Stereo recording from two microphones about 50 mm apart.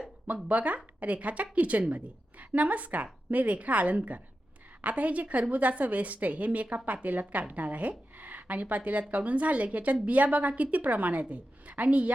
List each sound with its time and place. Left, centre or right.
0.4 s a woman's voice: right